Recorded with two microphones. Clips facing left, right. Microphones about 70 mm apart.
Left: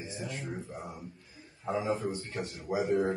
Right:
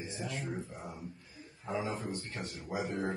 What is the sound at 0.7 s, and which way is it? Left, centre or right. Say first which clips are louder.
Speech: left 3 dB; centre.